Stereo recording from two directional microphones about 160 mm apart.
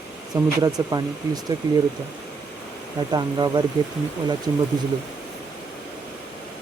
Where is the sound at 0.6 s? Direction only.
25° right (ahead or behind).